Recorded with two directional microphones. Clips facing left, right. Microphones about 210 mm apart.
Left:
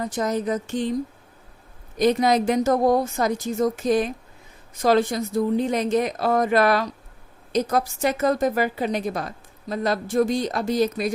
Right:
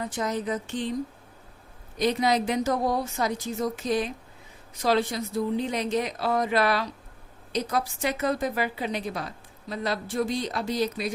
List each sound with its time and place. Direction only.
0.0 s a woman's voice: 40° left (ahead or behind)
2.0 s a woman's voice: 45° left (ahead or behind)